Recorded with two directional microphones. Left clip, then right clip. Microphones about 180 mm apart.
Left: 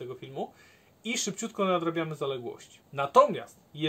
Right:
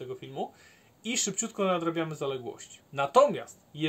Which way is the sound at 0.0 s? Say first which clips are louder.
Right 1 dB; 25° right (ahead or behind).